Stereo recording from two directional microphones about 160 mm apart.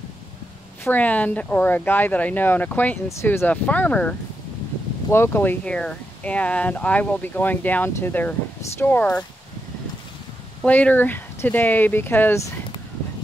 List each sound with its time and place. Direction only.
0.8 s speech: 10° left (ahead or behind)
10.6 s speech: 10° left (ahead or behind)